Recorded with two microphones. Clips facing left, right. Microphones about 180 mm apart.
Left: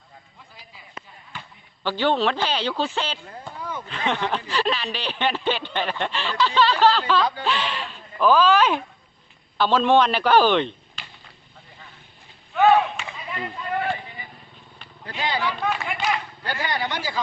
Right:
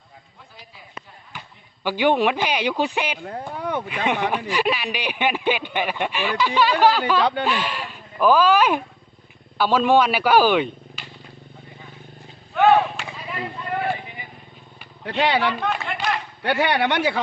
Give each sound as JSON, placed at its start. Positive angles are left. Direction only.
{"t": 1.8, "sound": "speech", "side_deg": -15}
{"t": 3.2, "sound": "a sound", "side_deg": -65}
{"t": 3.8, "sound": "speech", "side_deg": -10}
{"t": 12.5, "sound": "a sound", "side_deg": -5}
{"t": 15.0, "sound": "speech", "side_deg": -70}
{"t": 15.6, "sound": "speech", "side_deg": 5}
{"t": 16.4, "sound": "speech", "side_deg": -70}